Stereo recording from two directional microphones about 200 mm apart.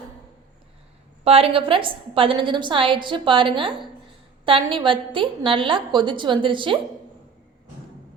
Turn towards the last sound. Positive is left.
turn(degrees=-25)  # may be behind; listen again after turning